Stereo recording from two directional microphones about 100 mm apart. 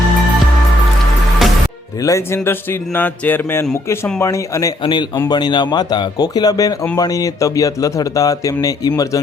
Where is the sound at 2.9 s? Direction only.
20° left (ahead or behind).